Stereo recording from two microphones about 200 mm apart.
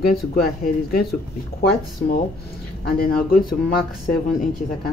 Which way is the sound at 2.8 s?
45° left (ahead or behind).